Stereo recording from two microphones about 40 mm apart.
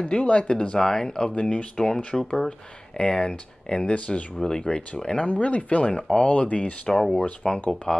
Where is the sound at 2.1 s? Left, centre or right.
Centre.